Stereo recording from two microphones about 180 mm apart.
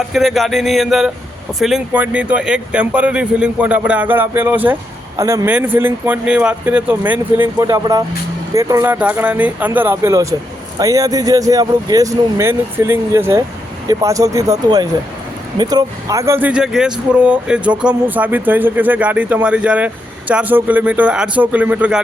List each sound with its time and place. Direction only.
0.1 s speech: centre (ahead or behind)